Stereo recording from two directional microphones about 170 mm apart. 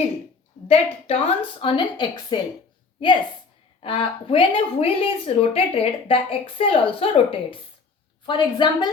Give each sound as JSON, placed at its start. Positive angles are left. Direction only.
{"t": 0.7, "sound": "speech", "side_deg": 35}
{"t": 3.8, "sound": "a woman's voice", "side_deg": 30}